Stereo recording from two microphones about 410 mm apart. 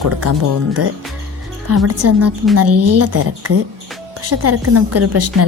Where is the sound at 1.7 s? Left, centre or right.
Right.